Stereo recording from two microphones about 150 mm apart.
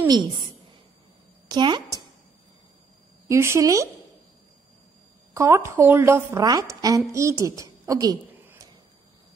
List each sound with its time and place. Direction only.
0.1 s a woman's voice: 30° right (ahead or behind)
1.5 s a woman's voice: 30° right (ahead or behind)
3.3 s a woman's voice: 20° right (ahead or behind)
5.3 s a woman's voice: 20° right (ahead or behind)
7.8 s a sound: 25° right (ahead or behind)